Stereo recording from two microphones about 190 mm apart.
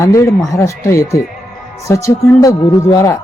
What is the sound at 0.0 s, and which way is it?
Speech, 15° left (ahead or behind).